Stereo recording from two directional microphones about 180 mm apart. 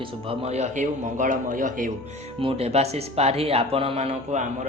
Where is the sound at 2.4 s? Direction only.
35° right (ahead or behind).